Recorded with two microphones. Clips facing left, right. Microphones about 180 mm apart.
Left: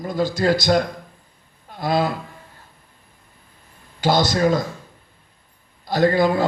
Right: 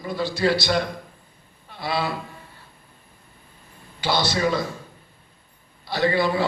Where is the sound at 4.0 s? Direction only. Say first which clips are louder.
Left 5 dB; 45° left (ahead or behind).